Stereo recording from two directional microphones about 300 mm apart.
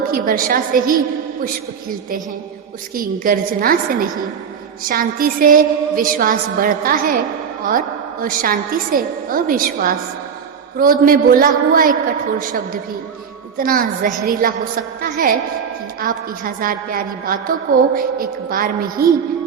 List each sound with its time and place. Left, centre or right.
0.1 s a woman's voice: right
2.9 s a woman's voice: right